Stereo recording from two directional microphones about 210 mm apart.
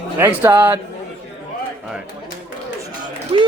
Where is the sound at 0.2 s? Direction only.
10° right (ahead or behind).